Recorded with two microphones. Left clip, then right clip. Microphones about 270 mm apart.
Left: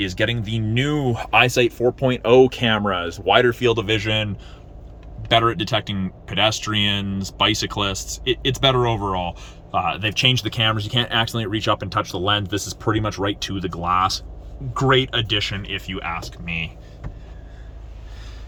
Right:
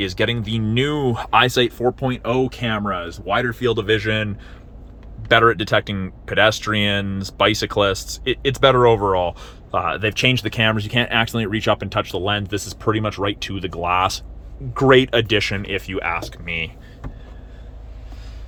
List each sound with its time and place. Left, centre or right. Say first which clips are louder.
0.0 s speech: right 1 dB; centre
5.3 s speech: right 4 dB; centre